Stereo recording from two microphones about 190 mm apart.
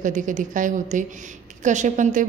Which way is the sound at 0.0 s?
40° right (ahead or behind).